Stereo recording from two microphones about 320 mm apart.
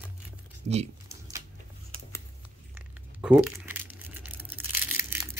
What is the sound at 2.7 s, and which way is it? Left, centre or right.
Crumpling, centre.